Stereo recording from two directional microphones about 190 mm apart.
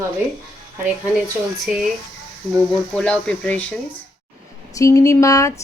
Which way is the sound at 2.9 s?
5° left (ahead or behind).